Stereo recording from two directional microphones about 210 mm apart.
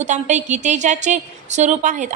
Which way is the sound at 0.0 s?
35° right (ahead or behind).